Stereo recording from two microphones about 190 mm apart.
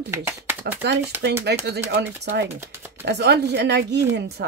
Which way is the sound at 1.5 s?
60° right (ahead or behind).